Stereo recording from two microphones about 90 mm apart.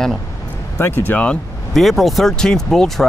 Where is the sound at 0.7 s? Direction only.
25° left (ahead or behind).